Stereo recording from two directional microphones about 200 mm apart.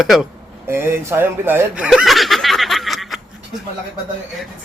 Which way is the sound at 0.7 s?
10° right (ahead or behind).